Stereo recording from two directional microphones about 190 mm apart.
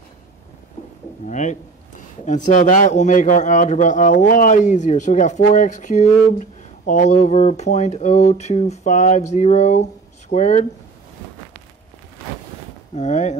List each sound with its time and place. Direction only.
1.2 s a man's voice: 40° left (ahead or behind)
12.9 s a man's voice: 40° left (ahead or behind)